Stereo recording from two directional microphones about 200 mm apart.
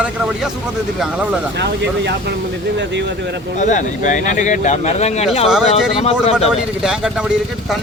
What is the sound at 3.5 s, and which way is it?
Speech, 40° left (ahead or behind).